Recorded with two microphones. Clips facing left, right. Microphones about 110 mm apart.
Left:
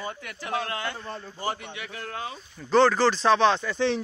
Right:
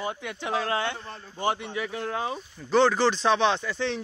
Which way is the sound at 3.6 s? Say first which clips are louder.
Left 4 dB; centre (ahead or behind).